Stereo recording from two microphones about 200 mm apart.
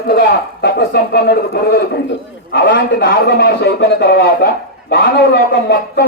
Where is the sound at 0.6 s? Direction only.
55° left (ahead or behind).